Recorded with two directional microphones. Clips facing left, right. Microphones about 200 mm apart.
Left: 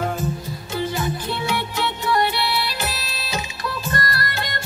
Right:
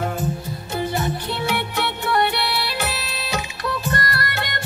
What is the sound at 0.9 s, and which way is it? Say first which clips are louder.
Music: right 1 dB; 65° right (ahead or behind).